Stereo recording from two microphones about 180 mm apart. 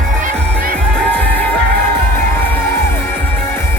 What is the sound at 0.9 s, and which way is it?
Music, 10° left (ahead or behind).